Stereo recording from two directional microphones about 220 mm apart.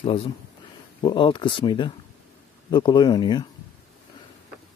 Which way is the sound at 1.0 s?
20° left (ahead or behind).